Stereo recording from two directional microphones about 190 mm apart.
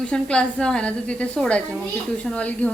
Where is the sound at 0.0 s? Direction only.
5° left (ahead or behind).